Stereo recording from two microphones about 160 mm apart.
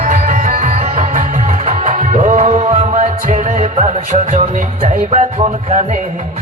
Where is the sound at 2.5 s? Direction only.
40° right (ahead or behind).